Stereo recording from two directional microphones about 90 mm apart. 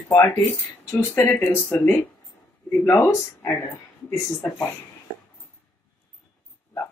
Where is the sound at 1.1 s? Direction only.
25° left (ahead or behind).